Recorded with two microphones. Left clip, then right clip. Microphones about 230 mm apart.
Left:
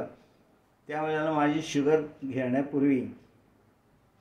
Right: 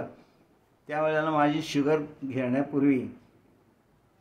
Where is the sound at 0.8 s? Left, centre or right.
Centre.